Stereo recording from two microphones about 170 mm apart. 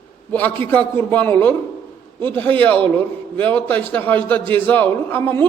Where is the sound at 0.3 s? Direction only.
10° left (ahead or behind).